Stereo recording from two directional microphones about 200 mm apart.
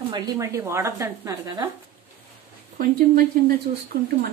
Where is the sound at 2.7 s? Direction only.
45° right (ahead or behind).